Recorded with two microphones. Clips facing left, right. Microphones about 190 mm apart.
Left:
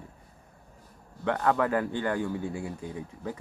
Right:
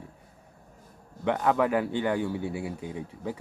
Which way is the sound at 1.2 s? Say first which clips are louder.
Right 1 dB; 15° right (ahead or behind).